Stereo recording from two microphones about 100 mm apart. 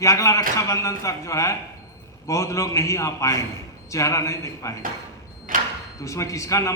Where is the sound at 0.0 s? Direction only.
35° left (ahead or behind).